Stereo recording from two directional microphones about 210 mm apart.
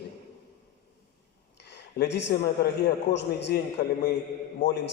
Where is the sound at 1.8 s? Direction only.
55° left (ahead or behind).